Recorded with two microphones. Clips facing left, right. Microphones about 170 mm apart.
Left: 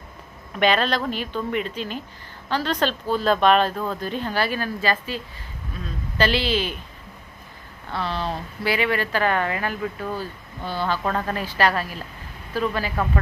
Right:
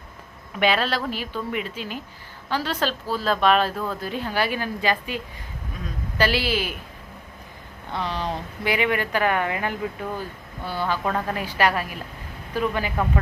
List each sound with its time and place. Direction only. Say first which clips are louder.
0.6 s a woman's voice: left 2 dB; 5° right (ahead or behind)
7.9 s speech: left 1 dB; 15° right (ahead or behind)